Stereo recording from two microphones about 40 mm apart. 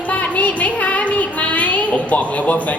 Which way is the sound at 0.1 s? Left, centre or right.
Left.